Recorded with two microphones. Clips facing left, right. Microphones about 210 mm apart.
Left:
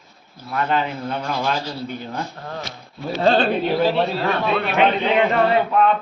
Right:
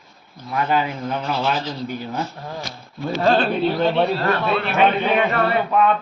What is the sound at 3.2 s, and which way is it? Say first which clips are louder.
Speech: left 1 dB; 35° left (ahead or behind).